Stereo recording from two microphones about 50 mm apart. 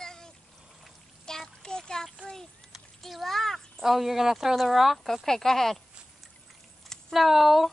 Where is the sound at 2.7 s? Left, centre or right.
Centre.